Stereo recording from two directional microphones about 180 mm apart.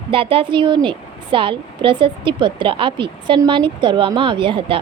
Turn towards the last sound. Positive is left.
turn(degrees=-30)  # may be behind; listen again after turning